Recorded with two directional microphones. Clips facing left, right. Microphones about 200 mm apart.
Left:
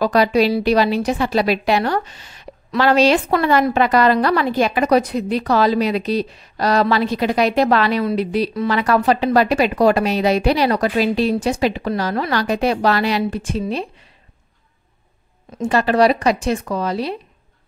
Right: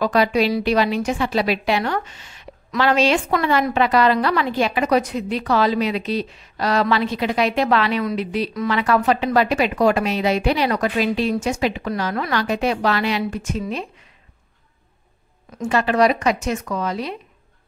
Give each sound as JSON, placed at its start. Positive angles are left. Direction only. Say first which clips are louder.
{"t": 0.0, "sound": "a woman's voice", "louder": "left 3 dB", "side_deg": 35}
{"t": 15.5, "sound": "a woman's voice", "louder": "left 3 dB", "side_deg": 35}